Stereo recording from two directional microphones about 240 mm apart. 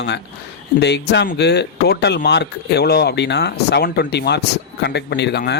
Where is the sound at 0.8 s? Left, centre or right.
Left.